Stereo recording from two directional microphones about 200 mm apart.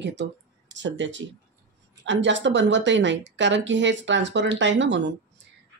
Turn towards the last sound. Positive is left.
turn(degrees=-65)  # may be behind; listen again after turning